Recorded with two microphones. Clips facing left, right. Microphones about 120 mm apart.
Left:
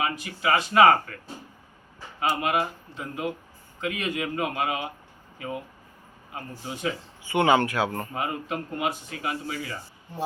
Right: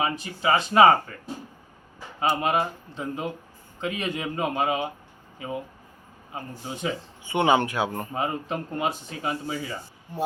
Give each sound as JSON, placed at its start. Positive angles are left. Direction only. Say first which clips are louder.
{"t": 0.0, "sound": "speech", "louder": "right 2 dB", "side_deg": -25}
{"t": 2.2, "sound": "speech", "louder": "right 1 dB", "side_deg": -25}